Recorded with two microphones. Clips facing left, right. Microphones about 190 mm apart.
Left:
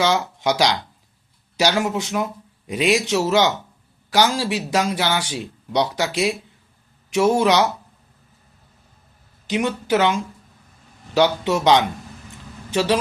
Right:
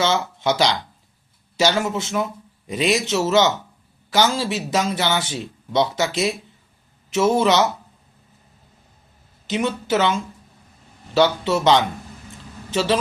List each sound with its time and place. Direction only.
0.0 s speech: 15° left (ahead or behind)
1.8 s speech: 15° left (ahead or behind)
9.5 s speech: 15° left (ahead or behind)